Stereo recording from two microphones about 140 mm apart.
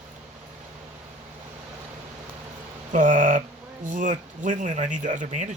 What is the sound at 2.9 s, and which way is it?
Speech, 65° right (ahead or behind).